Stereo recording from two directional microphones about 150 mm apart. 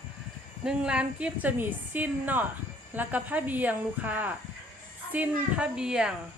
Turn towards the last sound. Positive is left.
turn(degrees=-5)  # may be behind; listen again after turning